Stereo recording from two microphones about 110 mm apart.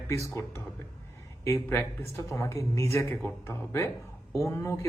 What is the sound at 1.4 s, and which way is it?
Speech, 25° left (ahead or behind).